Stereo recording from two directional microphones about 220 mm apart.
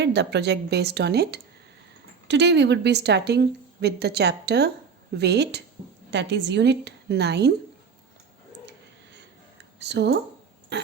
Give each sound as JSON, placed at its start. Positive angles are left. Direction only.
{"t": 0.0, "sound": "a woman's voice", "side_deg": -50}
{"t": 9.8, "sound": "a woman's voice", "side_deg": -50}
{"t": 10.7, "sound": "a sound", "side_deg": -50}